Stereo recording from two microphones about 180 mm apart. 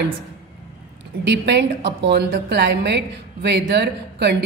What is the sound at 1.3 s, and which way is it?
A woman's voice, 70° right (ahead or behind).